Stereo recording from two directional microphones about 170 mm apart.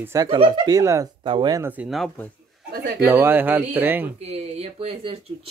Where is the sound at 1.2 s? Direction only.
30° right (ahead or behind).